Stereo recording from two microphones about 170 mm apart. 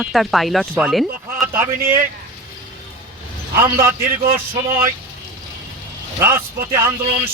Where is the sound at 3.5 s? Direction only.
15° right (ahead or behind).